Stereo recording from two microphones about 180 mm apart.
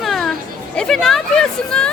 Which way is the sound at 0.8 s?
Centre (ahead or behind).